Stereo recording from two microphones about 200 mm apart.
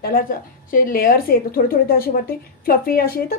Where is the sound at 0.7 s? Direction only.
45° left (ahead or behind).